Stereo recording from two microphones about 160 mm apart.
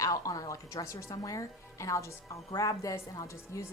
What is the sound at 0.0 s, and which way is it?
Speech, 20° left (ahead or behind).